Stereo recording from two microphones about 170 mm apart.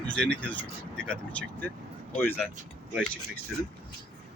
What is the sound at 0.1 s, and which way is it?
Speech, 5° left (ahead or behind).